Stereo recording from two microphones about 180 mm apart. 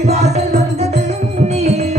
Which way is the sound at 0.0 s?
35° right (ahead or behind).